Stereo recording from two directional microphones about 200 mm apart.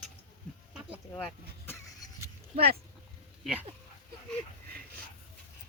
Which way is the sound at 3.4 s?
5° right (ahead or behind).